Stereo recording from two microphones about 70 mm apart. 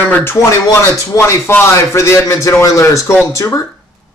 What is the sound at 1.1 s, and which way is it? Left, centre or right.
Speech, left.